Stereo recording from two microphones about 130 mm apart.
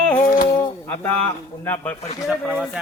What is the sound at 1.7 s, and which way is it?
Speech, 15° left (ahead or behind).